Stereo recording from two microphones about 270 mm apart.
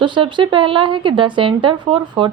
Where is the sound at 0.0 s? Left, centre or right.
Centre.